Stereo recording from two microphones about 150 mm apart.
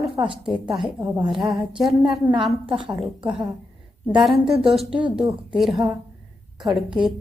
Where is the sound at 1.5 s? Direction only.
Centre (ahead or behind).